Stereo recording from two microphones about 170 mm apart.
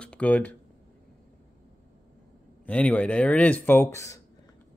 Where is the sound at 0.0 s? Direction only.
5° left (ahead or behind).